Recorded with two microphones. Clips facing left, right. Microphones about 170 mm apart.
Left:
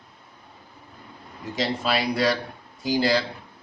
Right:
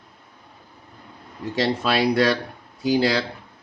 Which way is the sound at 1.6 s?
65° right (ahead or behind).